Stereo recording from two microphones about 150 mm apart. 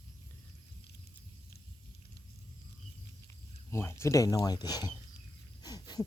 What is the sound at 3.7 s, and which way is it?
Speech, 15° left (ahead or behind).